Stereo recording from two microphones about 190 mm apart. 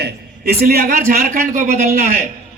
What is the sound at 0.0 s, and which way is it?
A man's voice, 55° right (ahead or behind).